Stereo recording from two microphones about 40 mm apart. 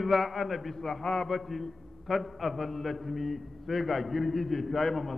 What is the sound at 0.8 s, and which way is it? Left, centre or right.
Speech, centre.